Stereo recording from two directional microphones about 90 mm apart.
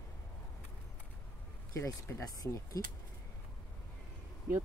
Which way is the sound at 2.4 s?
40° left (ahead or behind).